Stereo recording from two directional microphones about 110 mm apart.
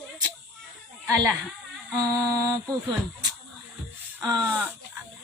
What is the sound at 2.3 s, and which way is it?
Speech, 35° right (ahead or behind).